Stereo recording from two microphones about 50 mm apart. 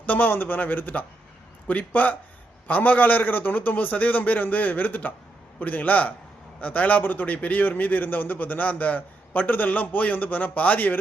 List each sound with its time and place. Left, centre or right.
0.0 s a man's voice: left